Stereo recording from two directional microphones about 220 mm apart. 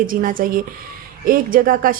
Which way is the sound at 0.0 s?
40° right (ahead or behind).